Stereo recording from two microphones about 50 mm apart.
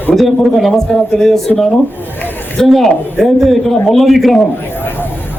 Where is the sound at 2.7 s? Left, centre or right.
Centre.